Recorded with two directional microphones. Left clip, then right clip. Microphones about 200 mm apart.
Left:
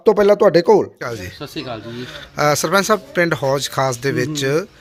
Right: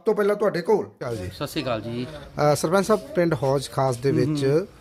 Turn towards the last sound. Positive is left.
turn(degrees=0)  # may be behind; listen again after turning